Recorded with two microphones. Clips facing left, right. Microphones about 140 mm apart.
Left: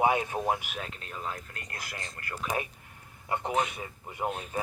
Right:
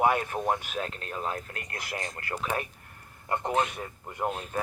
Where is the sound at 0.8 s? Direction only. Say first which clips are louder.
Right 5 dB; 45° right (ahead or behind).